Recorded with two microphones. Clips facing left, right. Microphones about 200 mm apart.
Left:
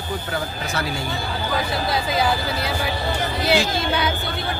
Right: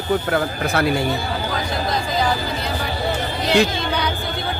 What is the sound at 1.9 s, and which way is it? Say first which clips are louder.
Speech: even; 5° left (ahead or behind).